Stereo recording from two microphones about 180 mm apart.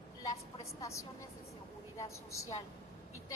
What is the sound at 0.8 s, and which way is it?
A woman's voice, 15° left (ahead or behind).